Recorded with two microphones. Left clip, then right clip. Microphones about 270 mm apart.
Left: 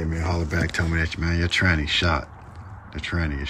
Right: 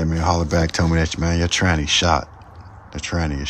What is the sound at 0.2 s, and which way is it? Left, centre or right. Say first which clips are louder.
Speech: right 8 dB; centre.